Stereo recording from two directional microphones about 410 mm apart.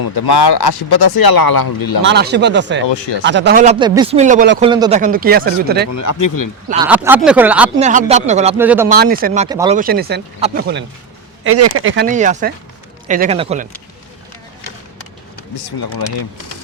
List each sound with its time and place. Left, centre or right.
0.0 s speech: left
2.0 s speech: right
2.8 s speech: left
3.2 s speech: right
5.9 s speech: left
6.8 s speech: centre
7.8 s speech: centre
8.5 s speech: centre
8.9 s speech: right
11.4 s speech: right; by 13.7 s centre